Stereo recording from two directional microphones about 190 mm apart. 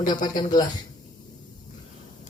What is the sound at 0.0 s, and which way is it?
Speech, 20° left (ahead or behind).